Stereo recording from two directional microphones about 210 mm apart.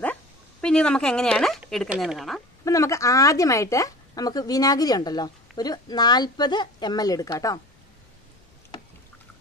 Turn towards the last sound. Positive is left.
turn(degrees=15)  # may be behind; listen again after turning